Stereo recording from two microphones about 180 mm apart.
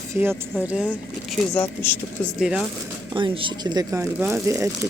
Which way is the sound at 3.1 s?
25° right (ahead or behind).